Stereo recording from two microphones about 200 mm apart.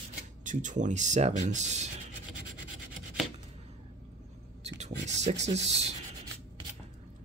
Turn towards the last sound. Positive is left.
turn(degrees=-30)  # may be behind; listen again after turning